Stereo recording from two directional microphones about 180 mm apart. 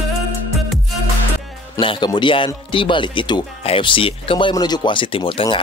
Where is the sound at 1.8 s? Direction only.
25° left (ahead or behind).